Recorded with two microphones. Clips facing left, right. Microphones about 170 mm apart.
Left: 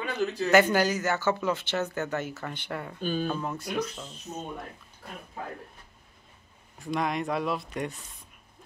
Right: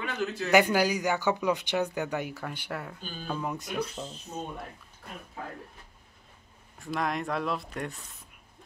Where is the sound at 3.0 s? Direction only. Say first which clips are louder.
Left 12 dB; 65° left (ahead or behind).